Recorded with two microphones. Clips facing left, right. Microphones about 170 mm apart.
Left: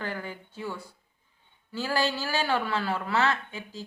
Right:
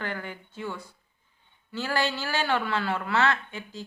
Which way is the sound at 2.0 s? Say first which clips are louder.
Even; 35° left (ahead or behind).